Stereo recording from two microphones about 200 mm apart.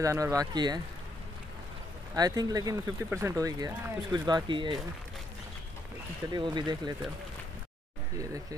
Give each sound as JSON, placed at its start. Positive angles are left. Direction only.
{"t": 0.0, "sound": "speech", "side_deg": -15}
{"t": 2.1, "sound": "speech", "side_deg": -20}
{"t": 6.3, "sound": "speech", "side_deg": -20}
{"t": 8.2, "sound": "speech", "side_deg": -15}